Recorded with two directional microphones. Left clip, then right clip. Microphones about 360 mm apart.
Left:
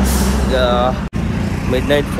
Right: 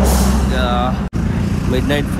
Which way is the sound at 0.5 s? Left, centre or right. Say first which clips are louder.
Left 7 dB; centre.